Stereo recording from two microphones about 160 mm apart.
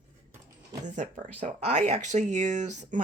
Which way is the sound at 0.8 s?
50° right (ahead or behind).